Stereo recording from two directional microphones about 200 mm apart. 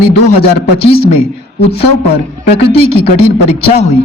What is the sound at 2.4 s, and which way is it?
A man's voice, 30° left (ahead or behind).